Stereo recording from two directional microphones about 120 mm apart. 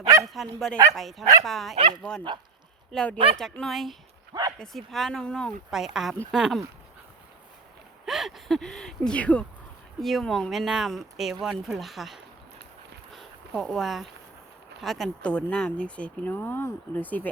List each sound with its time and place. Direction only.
0.0 s dog: 25° right (ahead or behind)
0.3 s speech: centre (ahead or behind)
1.7 s speech: 50° right (ahead or behind)
2.0 s speech: 5° left (ahead or behind)
8.0 s speech: centre (ahead or behind)
13.1 s a sound: centre (ahead or behind)
14.8 s speech: centre (ahead or behind)